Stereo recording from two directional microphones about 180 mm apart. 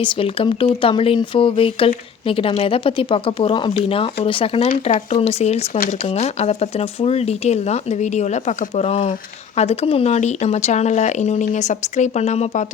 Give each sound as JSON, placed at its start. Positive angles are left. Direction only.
{"t": 0.0, "sound": "speech", "side_deg": 30}